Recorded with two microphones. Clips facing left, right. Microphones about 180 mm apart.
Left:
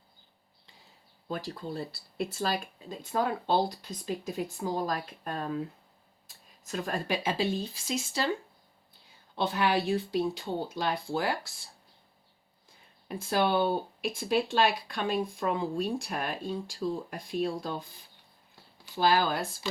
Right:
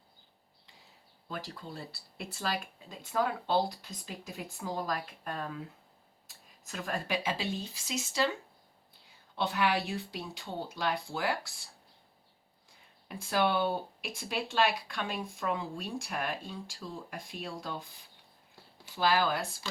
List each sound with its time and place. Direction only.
1.3 s speech: 35° left (ahead or behind)
6.7 s speech: 35° left (ahead or behind)
9.3 s speech: 35° left (ahead or behind)
13.1 s speech: 35° left (ahead or behind)
18.9 s speech: 30° left (ahead or behind)